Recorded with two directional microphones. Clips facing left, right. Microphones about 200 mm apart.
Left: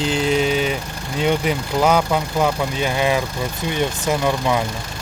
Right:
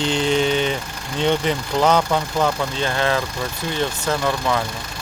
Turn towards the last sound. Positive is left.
turn(degrees=15)  # may be behind; listen again after turning